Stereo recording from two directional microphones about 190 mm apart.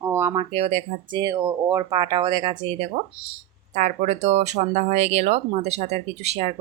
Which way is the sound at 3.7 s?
40° right (ahead or behind).